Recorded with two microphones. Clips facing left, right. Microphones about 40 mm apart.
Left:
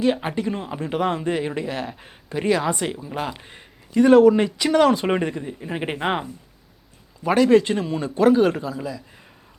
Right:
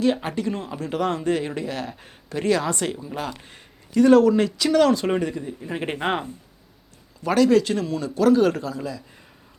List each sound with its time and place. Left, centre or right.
0.0 s speech: centre
7.3 s a man's voice: left